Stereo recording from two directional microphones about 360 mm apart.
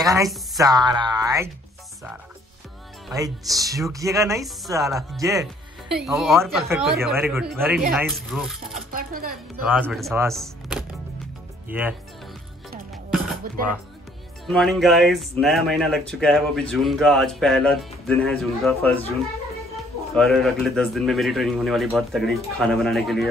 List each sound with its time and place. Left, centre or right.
0.0 s speech: centre
3.1 s speech: centre
8.9 s speech: right
9.7 s speech: centre
14.4 s speech: centre
20.2 s speech: centre